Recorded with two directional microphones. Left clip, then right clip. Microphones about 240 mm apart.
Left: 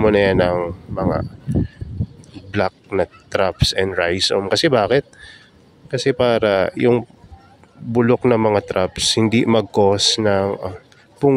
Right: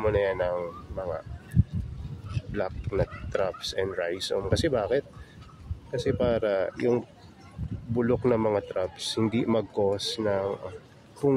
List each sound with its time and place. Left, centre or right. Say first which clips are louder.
0.0 s speech: left 11 dB; left
2.5 s speech: left 10 dB; left